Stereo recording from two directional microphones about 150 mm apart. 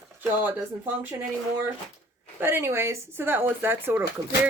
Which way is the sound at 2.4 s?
15° right (ahead or behind).